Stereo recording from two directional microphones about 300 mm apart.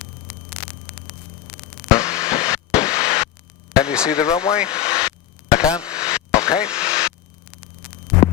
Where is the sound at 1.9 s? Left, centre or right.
Centre.